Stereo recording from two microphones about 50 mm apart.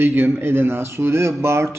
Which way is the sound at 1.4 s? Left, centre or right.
Right.